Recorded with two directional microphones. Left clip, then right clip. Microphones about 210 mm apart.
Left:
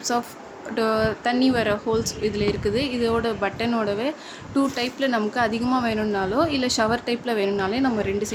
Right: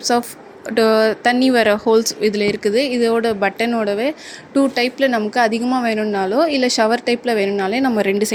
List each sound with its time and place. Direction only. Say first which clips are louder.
0.0 s a woman's voice: right 7 dB; 20° right (ahead or behind)